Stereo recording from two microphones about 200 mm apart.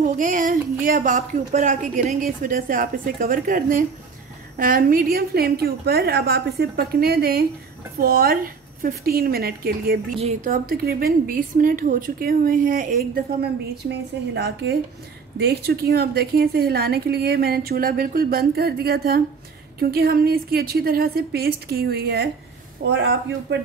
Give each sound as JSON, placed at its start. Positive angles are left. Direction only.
{"t": 0.2, "sound": "a woman's voice", "side_deg": -40}